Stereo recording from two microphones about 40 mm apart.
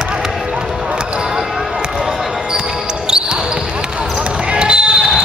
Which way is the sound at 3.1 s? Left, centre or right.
Centre.